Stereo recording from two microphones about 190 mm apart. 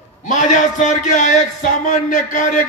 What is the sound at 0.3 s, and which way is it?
A man's voice, 40° left (ahead or behind).